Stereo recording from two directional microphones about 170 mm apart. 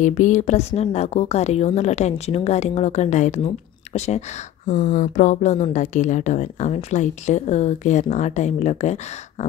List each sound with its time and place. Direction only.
0.0 s a woman's voice: 45° left (ahead or behind)